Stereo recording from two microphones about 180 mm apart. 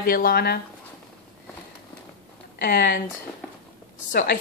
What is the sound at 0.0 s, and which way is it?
Speech, 55° left (ahead or behind).